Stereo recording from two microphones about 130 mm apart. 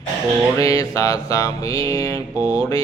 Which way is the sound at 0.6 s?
25° left (ahead or behind).